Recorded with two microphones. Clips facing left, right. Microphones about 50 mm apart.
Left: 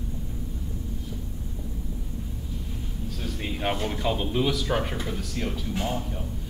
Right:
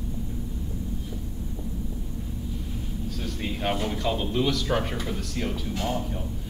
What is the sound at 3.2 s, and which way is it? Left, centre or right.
Speech, centre.